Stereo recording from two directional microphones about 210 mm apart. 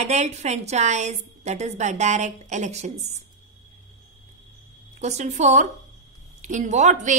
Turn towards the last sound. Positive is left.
turn(degrees=-35)  # may be behind; listen again after turning